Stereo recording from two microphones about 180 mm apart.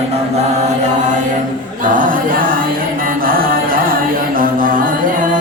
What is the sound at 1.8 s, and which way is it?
A capella, 45° right (ahead or behind).